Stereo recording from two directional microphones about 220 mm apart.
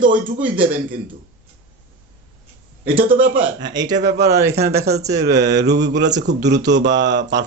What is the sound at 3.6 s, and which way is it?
Speech, 20° right (ahead or behind).